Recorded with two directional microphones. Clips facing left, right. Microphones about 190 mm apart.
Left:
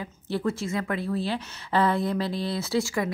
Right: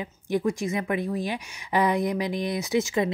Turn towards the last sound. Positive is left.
turn(degrees=-20)  # may be behind; listen again after turning